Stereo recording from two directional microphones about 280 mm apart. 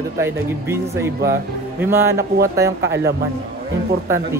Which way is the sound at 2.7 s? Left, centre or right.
Right.